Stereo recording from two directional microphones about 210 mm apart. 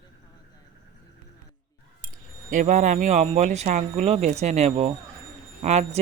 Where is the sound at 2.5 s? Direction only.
40° right (ahead or behind).